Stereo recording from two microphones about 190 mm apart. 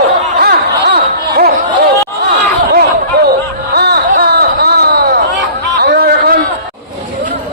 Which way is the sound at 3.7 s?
55° right (ahead or behind).